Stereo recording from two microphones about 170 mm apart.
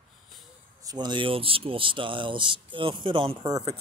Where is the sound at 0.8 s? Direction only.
25° right (ahead or behind).